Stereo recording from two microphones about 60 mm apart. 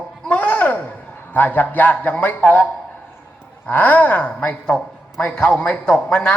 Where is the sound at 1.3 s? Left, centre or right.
Left.